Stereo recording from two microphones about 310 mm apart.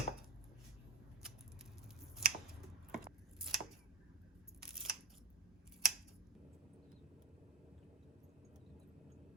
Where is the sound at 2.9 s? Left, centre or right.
Centre.